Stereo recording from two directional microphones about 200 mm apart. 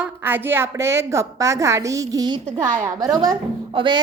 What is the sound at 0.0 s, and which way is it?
A woman's voice, 10° right (ahead or behind).